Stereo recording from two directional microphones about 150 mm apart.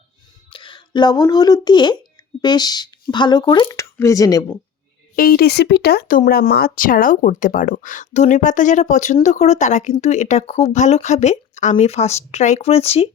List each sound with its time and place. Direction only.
0.5 s speech: 35° left (ahead or behind)
5.1 s speech: 75° left (ahead or behind)
6.7 s speech: 65° left (ahead or behind); by 13.1 s 45° left (ahead or behind)